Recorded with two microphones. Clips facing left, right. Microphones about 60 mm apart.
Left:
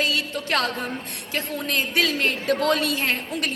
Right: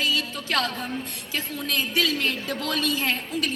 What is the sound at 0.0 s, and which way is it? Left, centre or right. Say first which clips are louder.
Music: left 2 dB; left.